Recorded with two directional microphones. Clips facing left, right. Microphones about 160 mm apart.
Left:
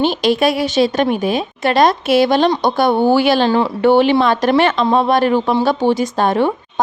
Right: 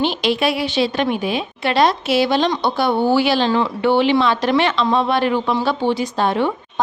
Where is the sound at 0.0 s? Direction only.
45° left (ahead or behind).